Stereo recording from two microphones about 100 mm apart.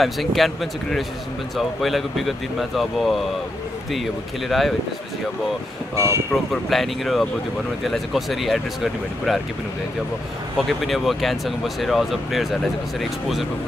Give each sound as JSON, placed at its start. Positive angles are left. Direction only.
{"t": 0.0, "sound": "speech", "side_deg": 0}
{"t": 5.9, "sound": "speech", "side_deg": -30}
{"t": 6.3, "sound": "speech", "side_deg": 0}
{"t": 10.7, "sound": "speech", "side_deg": 0}